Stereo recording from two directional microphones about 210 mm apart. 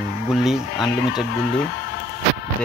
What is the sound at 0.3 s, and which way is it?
Speech, centre (ahead or behind).